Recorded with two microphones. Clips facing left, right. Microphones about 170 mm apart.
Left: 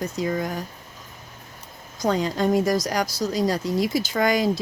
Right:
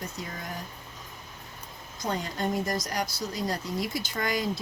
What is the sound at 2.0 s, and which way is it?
Speech, 90° left.